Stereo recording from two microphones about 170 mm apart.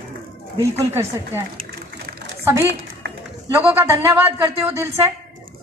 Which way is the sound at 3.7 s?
15° right (ahead or behind).